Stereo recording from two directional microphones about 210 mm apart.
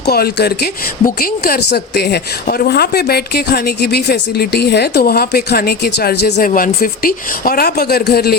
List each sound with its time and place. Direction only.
0.0 s a woman's voice: 50° left (ahead or behind)